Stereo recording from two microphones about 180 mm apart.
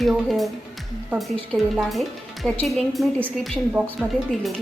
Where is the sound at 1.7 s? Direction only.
Centre (ahead or behind).